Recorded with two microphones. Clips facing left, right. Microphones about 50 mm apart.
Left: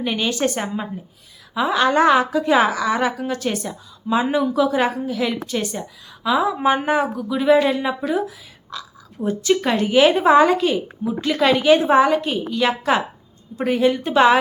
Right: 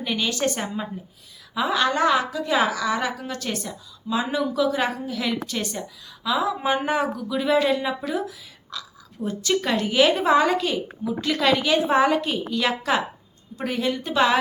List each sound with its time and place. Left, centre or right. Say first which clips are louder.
0.0 s speech: left 3 dB; left
1.9 s a woman's voice: left 6 dB; left; by 11.7 s centre
11.9 s a woman's voice: left 4 dB; centre; by 14.3 s left